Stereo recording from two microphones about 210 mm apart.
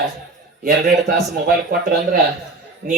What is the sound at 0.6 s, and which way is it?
A man's voice, 45° right (ahead or behind).